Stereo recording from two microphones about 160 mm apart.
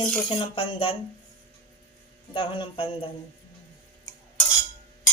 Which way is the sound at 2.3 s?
35° left (ahead or behind).